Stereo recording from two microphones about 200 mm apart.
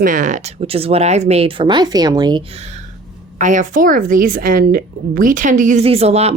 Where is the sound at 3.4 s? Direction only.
40° right (ahead or behind).